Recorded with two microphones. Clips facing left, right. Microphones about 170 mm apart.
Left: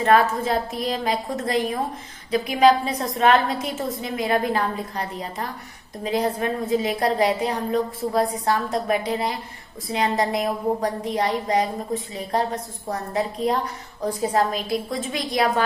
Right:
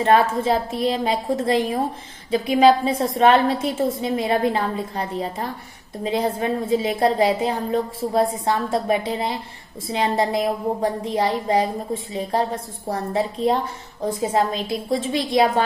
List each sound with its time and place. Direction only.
0.0 s a woman's voice: 30° right (ahead or behind)